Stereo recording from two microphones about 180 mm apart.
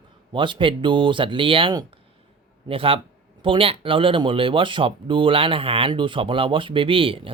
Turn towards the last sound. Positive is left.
turn(degrees=-30)  # may be behind; listen again after turning